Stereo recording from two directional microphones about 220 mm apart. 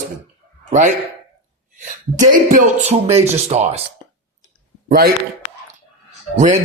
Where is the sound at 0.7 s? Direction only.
35° right (ahead or behind).